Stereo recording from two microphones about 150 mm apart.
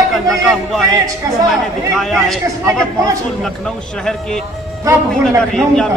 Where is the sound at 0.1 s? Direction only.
Centre (ahead or behind).